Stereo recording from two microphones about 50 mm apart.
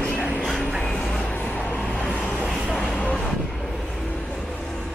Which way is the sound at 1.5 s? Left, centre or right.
Centre.